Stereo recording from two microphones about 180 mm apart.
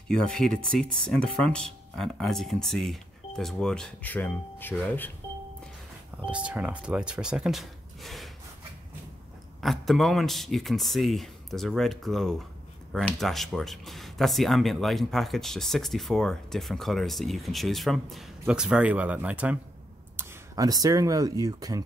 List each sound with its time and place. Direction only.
0.1 s speech: 5° left (ahead or behind)
6.2 s speech: 5° right (ahead or behind)
9.6 s speech: centre (ahead or behind)
20.2 s speech: 20° right (ahead or behind)